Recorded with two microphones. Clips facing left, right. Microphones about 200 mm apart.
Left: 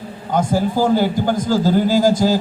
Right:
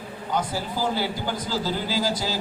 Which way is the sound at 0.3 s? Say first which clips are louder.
Left 10 dB; 50° left (ahead or behind).